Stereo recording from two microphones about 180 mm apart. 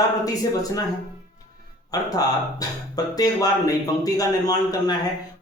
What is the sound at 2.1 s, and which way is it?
Speech, 20° left (ahead or behind).